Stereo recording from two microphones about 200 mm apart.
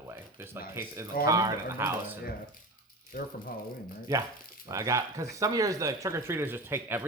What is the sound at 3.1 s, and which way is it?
Speech, 45° left (ahead or behind).